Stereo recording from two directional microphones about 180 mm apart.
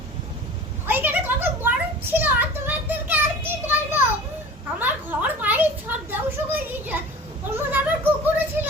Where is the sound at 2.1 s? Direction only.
10° right (ahead or behind).